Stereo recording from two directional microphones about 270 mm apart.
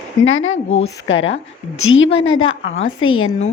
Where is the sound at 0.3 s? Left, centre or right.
Left.